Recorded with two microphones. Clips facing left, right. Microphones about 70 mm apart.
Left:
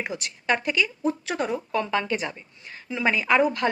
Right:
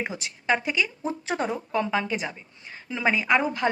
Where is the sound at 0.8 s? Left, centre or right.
Right.